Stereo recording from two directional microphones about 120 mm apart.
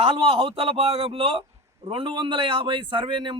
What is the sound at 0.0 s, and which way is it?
A man's voice, 50° right (ahead or behind).